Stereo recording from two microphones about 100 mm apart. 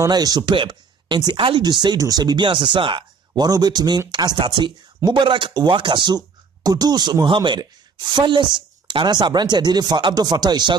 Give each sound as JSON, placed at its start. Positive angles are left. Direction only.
{"t": 0.0, "sound": "speech", "side_deg": -40}